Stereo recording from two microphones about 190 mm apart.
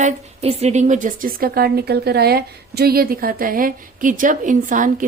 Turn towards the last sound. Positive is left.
turn(degrees=-45)  # may be behind; listen again after turning